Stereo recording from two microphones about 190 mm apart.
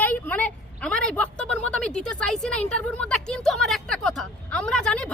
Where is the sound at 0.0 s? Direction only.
10° left (ahead or behind).